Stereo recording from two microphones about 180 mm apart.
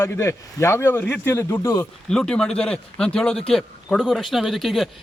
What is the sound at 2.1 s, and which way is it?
Speech, 5° left (ahead or behind).